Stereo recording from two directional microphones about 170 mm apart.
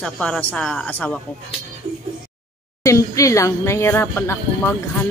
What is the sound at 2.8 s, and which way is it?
Speech, 20° left (ahead or behind).